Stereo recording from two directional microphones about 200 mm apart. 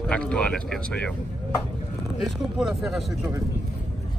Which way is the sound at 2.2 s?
Centre (ahead or behind).